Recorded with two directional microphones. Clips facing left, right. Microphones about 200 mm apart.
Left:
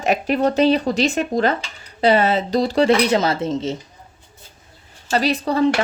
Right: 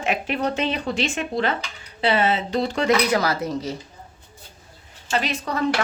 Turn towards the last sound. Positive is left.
turn(degrees=30)  # may be behind; listen again after turning